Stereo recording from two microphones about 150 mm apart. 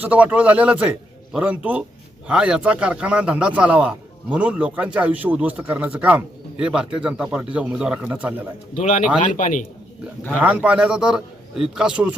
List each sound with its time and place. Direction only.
0.0 s a man's voice: 10° right (ahead or behind)
8.7 s a man's voice: 55° left (ahead or behind)
10.4 s a man's voice: 10° right (ahead or behind)